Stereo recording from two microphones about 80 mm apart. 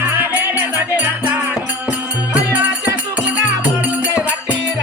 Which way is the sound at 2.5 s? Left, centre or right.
Right.